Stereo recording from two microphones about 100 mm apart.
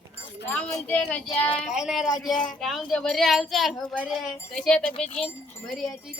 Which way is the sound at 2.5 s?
Centre (ahead or behind).